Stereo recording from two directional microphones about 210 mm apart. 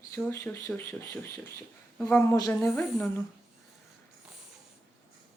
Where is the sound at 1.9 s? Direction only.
10° left (ahead or behind).